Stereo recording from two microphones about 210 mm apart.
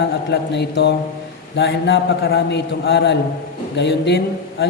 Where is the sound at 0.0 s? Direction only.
55° left (ahead or behind).